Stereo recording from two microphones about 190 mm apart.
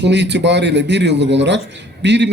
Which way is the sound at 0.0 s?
65° right (ahead or behind).